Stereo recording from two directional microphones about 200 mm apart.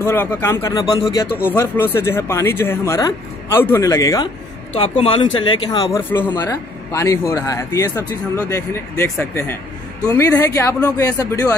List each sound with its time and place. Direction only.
0.0 s speech: 10° left (ahead or behind)
4.7 s speech: 30° left (ahead or behind)
5.9 s speech: 10° left (ahead or behind)